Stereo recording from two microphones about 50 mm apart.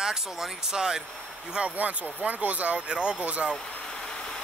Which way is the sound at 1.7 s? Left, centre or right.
Right.